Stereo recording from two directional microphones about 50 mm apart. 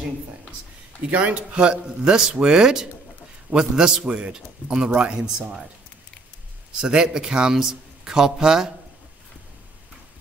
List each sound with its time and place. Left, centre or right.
1.1 s a man's voice: right
4.0 s a man's voice: right
6.8 s a man's voice: centre